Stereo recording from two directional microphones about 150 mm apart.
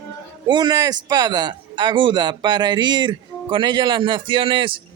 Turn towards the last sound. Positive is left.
turn(degrees=-35)  # may be behind; listen again after turning